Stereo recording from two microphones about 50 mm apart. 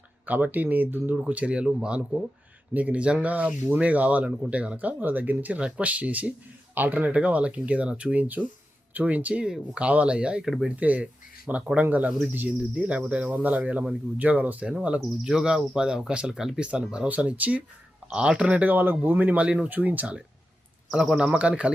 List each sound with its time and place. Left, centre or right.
0.3 s speech: right
1.1 s speech: right
7.1 s speech: right
12.5 s speech: right
15.3 s speech: centre
17.2 s speech: right
18.7 s speech: right
20.9 s speech: centre